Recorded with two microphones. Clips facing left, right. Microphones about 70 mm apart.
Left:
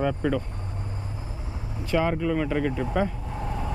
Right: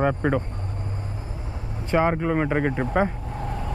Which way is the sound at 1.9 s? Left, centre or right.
Right.